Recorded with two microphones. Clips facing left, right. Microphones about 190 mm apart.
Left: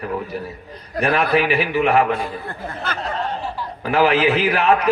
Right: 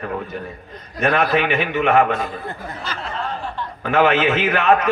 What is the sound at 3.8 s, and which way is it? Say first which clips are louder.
A man's voice: even; 35° left (ahead or behind).